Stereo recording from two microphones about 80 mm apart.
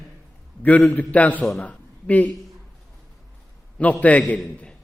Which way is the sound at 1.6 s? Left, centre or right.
Centre.